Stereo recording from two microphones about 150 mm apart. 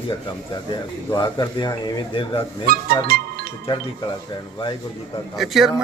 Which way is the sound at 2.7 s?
80° right.